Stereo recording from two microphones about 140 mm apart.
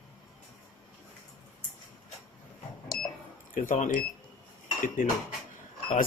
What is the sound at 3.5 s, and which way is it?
Speech, 75° left (ahead or behind).